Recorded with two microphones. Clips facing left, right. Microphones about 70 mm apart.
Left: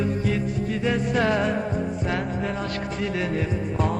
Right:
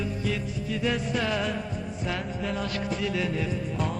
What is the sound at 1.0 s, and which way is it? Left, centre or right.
Music, left.